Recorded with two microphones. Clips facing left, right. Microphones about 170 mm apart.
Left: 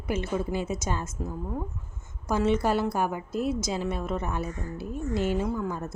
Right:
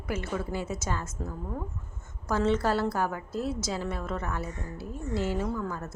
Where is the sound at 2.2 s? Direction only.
15° left (ahead or behind).